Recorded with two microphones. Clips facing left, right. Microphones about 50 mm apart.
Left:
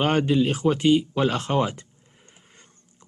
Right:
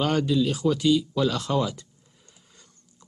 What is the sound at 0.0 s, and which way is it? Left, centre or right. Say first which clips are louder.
Speech: left 2 dB; left.